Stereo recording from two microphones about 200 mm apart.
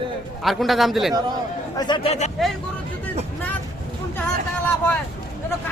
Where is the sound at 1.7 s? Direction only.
20° left (ahead or behind).